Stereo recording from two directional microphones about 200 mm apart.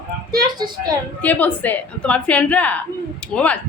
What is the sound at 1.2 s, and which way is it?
A woman's voice, 10° left (ahead or behind).